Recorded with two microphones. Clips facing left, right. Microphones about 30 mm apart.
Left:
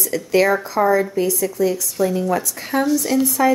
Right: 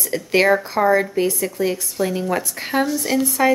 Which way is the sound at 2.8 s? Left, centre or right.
Centre.